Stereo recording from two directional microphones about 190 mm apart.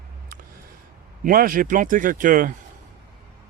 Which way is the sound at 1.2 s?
50° right (ahead or behind).